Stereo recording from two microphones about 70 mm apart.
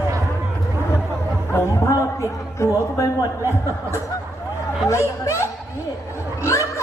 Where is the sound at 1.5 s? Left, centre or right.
Left.